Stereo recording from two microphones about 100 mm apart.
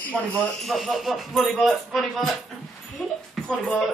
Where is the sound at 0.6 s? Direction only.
Centre (ahead or behind).